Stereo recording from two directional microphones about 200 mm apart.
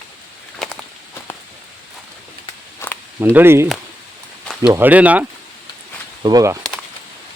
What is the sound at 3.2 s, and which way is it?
Speech, 10° right (ahead or behind).